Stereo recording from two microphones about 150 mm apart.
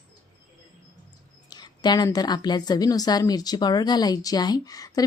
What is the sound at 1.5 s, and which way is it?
A woman's voice, 25° left (ahead or behind).